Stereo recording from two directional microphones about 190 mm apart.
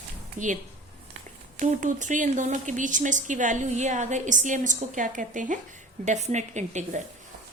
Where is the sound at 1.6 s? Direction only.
40° right (ahead or behind).